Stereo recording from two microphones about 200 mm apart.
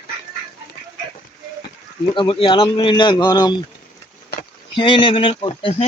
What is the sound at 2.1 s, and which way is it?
Speech, 25° left (ahead or behind).